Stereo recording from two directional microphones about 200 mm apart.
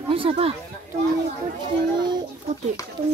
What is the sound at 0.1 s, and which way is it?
Speech, 25° right (ahead or behind).